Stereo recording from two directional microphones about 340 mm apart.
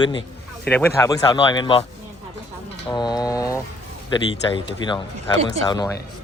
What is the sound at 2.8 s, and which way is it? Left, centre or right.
Speech, centre.